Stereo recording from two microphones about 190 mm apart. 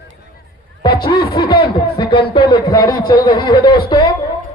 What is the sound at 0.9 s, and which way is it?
Speech, 55° left (ahead or behind).